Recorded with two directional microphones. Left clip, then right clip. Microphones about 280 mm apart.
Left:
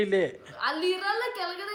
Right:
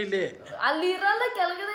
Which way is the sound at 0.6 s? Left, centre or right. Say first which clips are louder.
Right 3 dB; centre.